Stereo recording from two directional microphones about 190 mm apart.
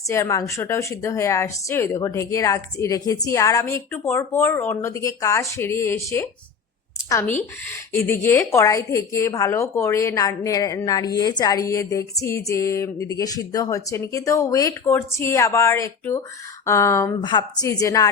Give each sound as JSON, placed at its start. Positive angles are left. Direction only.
{"t": 0.1, "sound": "a woman's voice", "side_deg": 15}